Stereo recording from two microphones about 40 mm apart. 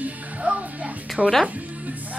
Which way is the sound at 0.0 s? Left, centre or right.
Right.